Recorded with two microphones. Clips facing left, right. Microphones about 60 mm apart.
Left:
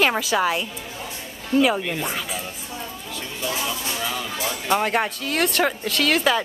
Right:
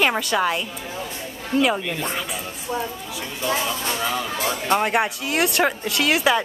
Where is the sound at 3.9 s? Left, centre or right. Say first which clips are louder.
Right 3 dB; centre.